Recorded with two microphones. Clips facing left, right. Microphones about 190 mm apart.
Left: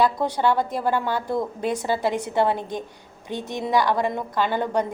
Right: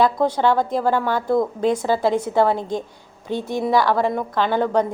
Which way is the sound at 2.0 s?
15° left (ahead or behind).